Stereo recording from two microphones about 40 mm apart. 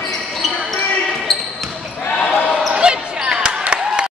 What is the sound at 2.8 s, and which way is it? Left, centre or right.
Basketball bounce, right.